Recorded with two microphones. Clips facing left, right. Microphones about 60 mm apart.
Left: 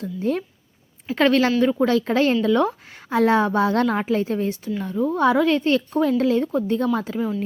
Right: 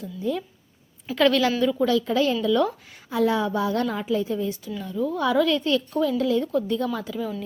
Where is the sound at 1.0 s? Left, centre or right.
Left.